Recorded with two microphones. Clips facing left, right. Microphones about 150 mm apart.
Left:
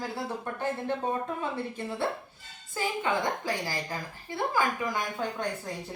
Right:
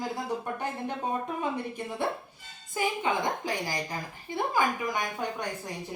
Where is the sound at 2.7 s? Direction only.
15° right (ahead or behind).